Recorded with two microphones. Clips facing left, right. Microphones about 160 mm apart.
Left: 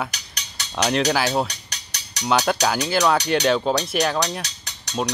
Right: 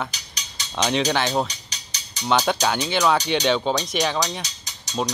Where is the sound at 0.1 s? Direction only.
65° left (ahead or behind).